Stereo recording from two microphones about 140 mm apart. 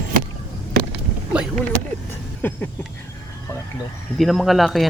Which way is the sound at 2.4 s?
10° left (ahead or behind).